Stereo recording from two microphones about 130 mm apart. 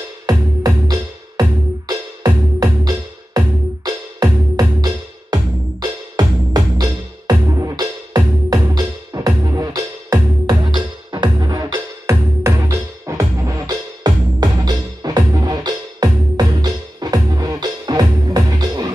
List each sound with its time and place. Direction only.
0.3 s music: 30° right (ahead or behind)